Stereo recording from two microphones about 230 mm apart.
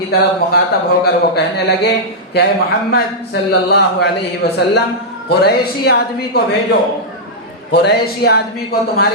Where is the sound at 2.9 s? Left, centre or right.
Left.